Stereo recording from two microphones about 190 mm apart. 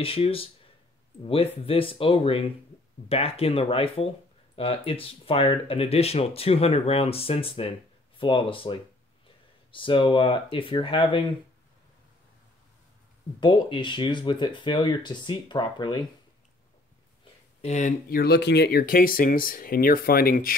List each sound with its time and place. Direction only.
0.0 s speech: 30° left (ahead or behind)
13.4 s speech: 25° left (ahead or behind)
17.6 s speech: 35° left (ahead or behind)